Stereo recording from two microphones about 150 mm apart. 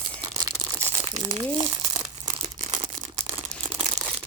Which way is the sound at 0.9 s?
20° right (ahead or behind).